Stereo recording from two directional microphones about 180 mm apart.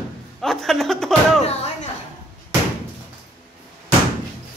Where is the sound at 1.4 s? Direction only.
40° left (ahead or behind).